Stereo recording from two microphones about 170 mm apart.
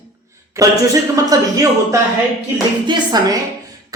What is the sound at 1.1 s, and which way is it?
Speech, 20° right (ahead or behind).